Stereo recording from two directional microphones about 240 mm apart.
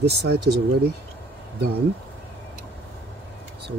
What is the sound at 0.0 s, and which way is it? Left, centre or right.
Speech, right.